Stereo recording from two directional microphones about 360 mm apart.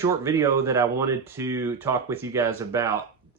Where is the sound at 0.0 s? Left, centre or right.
Centre.